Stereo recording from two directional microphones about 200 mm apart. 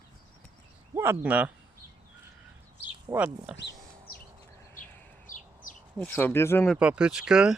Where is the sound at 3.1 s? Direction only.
5° right (ahead or behind).